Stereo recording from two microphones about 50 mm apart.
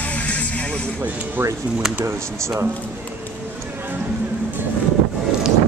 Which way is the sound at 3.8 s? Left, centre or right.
Right.